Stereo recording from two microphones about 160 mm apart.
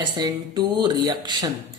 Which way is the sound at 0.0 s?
25° right (ahead or behind).